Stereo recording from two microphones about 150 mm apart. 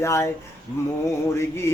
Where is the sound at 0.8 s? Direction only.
20° left (ahead or behind).